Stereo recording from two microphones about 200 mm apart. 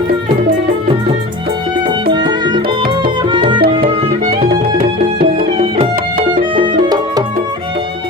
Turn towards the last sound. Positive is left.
turn(degrees=-20)  # may be behind; listen again after turning